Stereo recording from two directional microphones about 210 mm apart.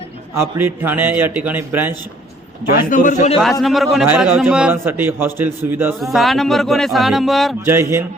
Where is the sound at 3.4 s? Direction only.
Centre (ahead or behind).